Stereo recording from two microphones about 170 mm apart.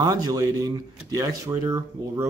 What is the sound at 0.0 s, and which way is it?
A man's voice, 20° right (ahead or behind).